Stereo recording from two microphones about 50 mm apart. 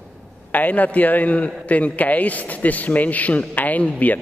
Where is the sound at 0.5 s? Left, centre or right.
Left.